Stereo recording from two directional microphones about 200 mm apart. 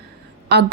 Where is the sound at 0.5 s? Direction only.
55° right (ahead or behind).